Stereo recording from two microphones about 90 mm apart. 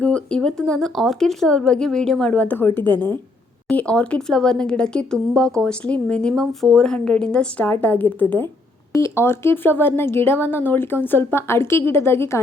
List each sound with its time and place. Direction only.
0.0 s speech: 10° left (ahead or behind)
2.3 s speech: 15° left (ahead or behind)
3.7 s speech: 10° left (ahead or behind); by 12.4 s 30° left (ahead or behind)